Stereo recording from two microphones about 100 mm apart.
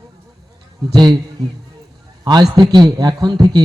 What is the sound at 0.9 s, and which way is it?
Speech, 45° right (ahead or behind).